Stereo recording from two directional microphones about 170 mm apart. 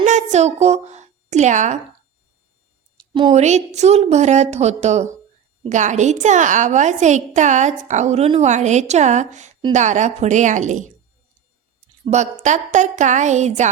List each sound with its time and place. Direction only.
0.0 s a woman's voice: 45° right (ahead or behind)
3.1 s a woman's voice: 30° right (ahead or behind)
3.3 s a woman's voice: 40° right (ahead or behind)
12.1 s a woman's voice: 45° right (ahead or behind)